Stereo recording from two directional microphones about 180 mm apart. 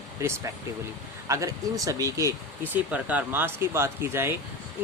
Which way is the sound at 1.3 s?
20° right (ahead or behind).